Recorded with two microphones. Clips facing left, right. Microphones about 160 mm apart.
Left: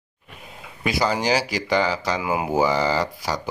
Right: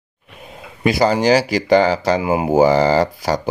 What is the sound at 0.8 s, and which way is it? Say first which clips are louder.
Speech: right 7 dB; 50° right (ahead or behind).